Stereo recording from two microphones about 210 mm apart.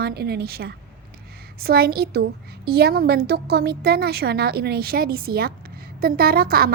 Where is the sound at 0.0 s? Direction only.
50° right (ahead or behind).